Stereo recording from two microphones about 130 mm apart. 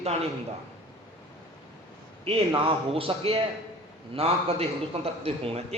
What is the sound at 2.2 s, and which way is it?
A man's voice, 45° right (ahead or behind).